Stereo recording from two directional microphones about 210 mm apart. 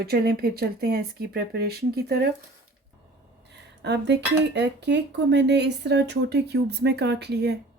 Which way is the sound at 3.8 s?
55° right (ahead or behind).